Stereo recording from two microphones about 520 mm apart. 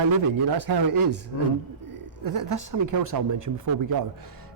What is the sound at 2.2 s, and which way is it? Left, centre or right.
Speech, right.